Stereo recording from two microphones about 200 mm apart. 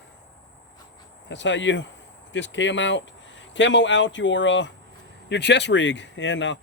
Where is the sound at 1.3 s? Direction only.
65° left (ahead or behind).